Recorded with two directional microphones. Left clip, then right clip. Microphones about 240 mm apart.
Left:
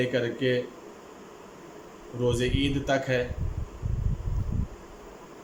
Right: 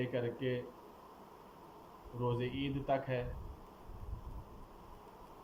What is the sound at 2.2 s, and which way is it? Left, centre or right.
Speech, left.